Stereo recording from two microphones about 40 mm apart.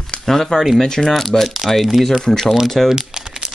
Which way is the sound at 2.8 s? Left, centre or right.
Centre.